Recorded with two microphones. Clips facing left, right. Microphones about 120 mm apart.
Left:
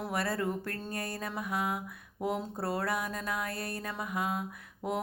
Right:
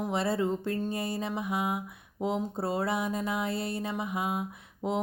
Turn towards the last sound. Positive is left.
turn(degrees=-20)  # may be behind; listen again after turning